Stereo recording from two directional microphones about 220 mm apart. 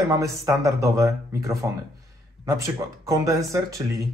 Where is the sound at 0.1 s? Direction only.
15° right (ahead or behind).